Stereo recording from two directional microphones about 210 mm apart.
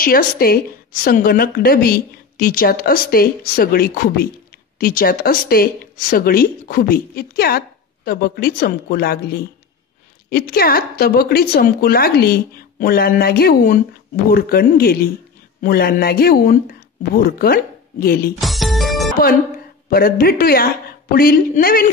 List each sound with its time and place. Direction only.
0.0 s speech: 45° left (ahead or behind)
18.4 s music: centre (ahead or behind)
19.9 s speech: 45° left (ahead or behind)